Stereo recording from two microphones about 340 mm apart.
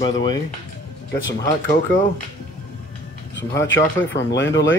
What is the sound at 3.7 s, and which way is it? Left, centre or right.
Speech, left.